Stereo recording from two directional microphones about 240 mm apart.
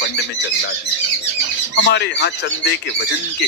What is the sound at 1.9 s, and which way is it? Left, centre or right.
Speech, left.